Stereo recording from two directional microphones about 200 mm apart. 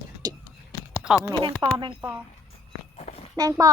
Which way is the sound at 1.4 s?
25° right (ahead or behind).